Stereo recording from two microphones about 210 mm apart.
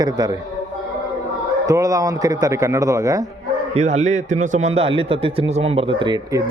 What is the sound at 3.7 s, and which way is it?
A man's voice, 30° right (ahead or behind).